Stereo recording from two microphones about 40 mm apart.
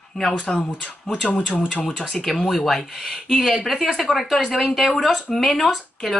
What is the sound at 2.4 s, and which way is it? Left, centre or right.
A woman's voice, centre.